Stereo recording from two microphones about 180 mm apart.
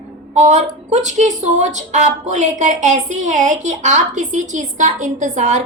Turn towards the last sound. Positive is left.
turn(degrees=-40)  # may be behind; listen again after turning